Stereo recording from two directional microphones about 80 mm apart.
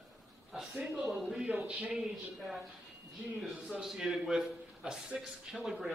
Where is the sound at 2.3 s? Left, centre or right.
Centre.